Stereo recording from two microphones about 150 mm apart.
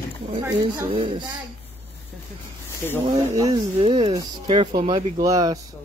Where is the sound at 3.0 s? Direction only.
25° right (ahead or behind).